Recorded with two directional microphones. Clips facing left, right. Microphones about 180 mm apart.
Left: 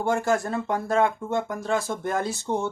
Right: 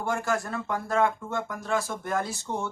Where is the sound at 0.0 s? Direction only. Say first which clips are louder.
Left 5 dB; 25° left (ahead or behind).